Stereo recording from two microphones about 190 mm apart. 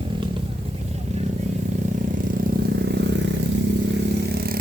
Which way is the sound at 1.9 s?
45° right (ahead or behind).